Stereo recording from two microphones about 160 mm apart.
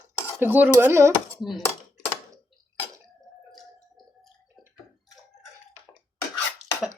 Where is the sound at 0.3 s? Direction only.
10° right (ahead or behind).